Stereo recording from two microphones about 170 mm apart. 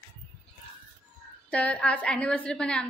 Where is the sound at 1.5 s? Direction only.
5° left (ahead or behind).